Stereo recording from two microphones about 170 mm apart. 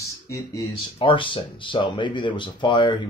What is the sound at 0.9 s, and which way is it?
Speech, 30° left (ahead or behind).